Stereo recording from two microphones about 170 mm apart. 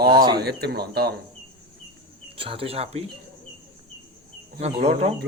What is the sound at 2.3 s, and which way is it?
Speech, 35° right (ahead or behind).